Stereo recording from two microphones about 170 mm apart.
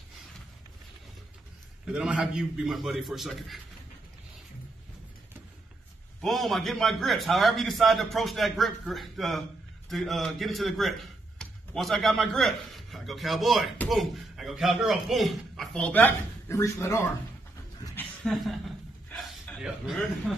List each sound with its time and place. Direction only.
1.9 s a man's voice: 5° right (ahead or behind)
6.2 s a man's voice: centre (ahead or behind); by 17.1 s 15° left (ahead or behind)
17.9 s a sound: 5° left (ahead or behind)